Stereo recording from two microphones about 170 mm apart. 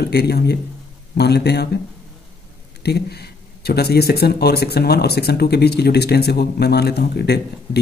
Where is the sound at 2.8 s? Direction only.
70° left (ahead or behind).